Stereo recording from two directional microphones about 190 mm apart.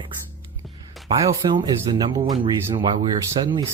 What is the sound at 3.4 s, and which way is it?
Speech, 25° right (ahead or behind).